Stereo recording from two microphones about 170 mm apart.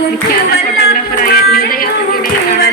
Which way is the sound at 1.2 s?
60° left (ahead or behind).